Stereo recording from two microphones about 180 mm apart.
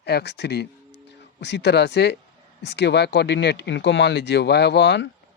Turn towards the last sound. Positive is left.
turn(degrees=75)  # may be behind; listen again after turning